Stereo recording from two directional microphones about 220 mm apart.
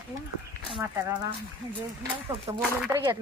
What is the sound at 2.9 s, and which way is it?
Speech, 15° right (ahead or behind).